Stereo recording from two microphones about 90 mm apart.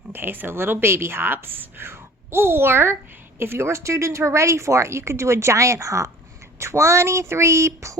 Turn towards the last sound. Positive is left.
turn(degrees=-30)  # may be behind; listen again after turning